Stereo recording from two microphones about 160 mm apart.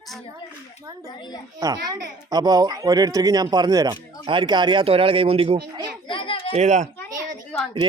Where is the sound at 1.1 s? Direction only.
25° left (ahead or behind).